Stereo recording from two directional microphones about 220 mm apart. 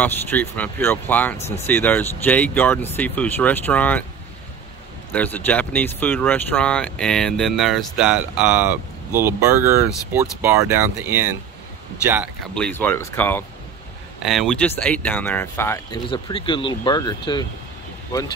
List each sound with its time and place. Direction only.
0.0 s speech: 10° left (ahead or behind)
5.1 s speech: 10° left (ahead or behind); by 11.2 s 10° right (ahead or behind)
12.5 s speech: 5° left (ahead or behind)
16.1 s speech: 20° left (ahead or behind)